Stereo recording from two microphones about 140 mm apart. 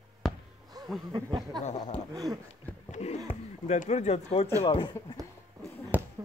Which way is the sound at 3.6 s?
55° left (ahead or behind).